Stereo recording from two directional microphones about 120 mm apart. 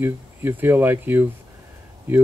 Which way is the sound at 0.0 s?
20° right (ahead or behind).